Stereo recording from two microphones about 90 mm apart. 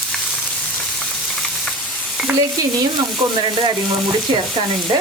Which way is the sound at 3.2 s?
55° right (ahead or behind).